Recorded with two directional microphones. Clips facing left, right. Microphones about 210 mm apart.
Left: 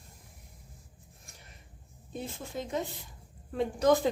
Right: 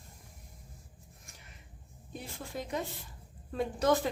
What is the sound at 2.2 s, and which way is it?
Speech, 25° left (ahead or behind).